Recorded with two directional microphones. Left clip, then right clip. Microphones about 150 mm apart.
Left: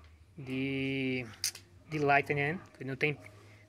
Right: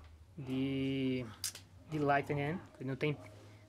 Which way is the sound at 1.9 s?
Centre (ahead or behind).